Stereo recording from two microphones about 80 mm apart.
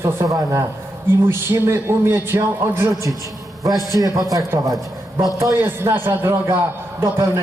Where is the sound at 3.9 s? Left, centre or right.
Right.